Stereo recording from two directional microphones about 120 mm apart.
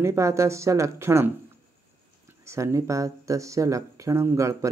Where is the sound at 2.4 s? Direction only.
25° right (ahead or behind).